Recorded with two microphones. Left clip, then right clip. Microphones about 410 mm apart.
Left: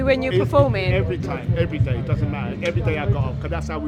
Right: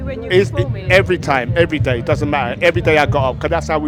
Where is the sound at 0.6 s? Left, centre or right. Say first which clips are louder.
Right 4 dB; right.